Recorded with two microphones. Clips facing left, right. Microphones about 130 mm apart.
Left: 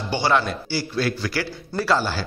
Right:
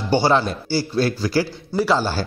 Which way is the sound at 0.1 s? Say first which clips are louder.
Right 4 dB; 30° right (ahead or behind).